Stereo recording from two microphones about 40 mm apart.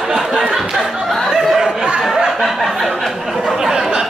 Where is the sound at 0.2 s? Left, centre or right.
Centre.